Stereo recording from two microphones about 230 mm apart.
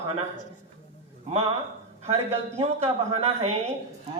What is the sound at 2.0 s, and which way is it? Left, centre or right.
Speech, right.